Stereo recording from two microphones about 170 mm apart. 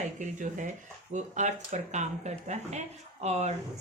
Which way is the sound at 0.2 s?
50° right (ahead or behind).